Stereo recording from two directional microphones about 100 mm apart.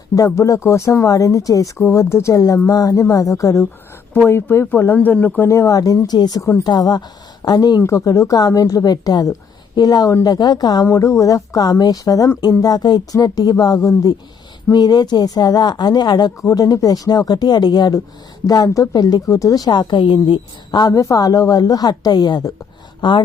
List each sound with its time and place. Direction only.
0.3 s a woman's voice: 30° left (ahead or behind)
4.1 s speech: 20° left (ahead or behind)
5.5 s a woman's voice: 30° left (ahead or behind)
7.8 s a woman's voice: 30° left (ahead or behind); by 23.2 s 50° left (ahead or behind)